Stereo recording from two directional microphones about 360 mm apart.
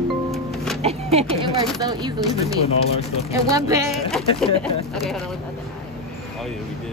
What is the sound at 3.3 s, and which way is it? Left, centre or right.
Speech, centre.